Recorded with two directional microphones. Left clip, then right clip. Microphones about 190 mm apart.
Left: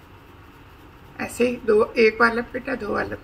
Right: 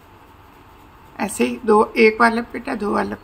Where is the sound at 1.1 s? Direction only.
45° right (ahead or behind).